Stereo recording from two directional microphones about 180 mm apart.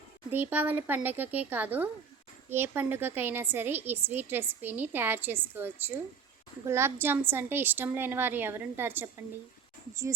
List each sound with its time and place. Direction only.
0.3 s a woman's voice: 10° right (ahead or behind)